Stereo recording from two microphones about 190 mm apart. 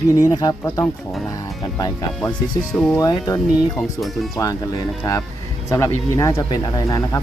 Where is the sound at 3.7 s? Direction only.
Centre (ahead or behind).